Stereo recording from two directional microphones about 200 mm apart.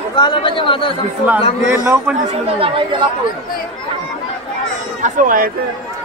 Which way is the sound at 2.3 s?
25° right (ahead or behind).